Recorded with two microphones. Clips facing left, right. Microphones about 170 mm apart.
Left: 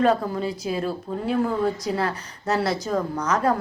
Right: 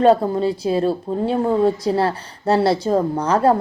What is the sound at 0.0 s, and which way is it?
A woman's voice, 30° right (ahead or behind).